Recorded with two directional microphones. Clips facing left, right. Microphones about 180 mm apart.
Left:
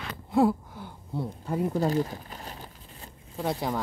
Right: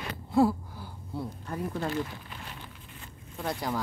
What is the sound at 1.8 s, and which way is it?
Crumpling, 40° left (ahead or behind).